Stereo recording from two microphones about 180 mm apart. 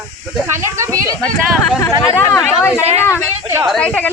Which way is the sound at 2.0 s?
15° left (ahead or behind).